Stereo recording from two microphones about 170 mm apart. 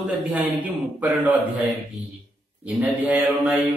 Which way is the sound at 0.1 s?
10° right (ahead or behind).